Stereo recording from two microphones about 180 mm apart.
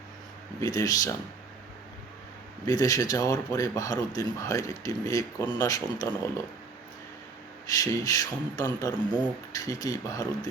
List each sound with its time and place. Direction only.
0.6 s speech: 20° left (ahead or behind)
2.6 s speech: 20° left (ahead or behind)
7.7 s speech: 20° left (ahead or behind)